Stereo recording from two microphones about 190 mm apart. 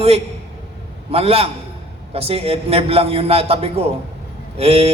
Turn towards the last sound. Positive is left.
turn(degrees=-30)  # may be behind; listen again after turning